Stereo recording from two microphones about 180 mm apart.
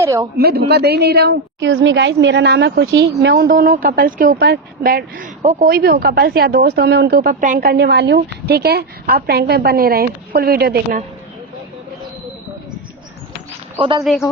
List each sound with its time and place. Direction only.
0.0 s speech: 15° right (ahead or behind)
0.3 s speech: 60° right (ahead or behind)
14.0 s speech: centre (ahead or behind)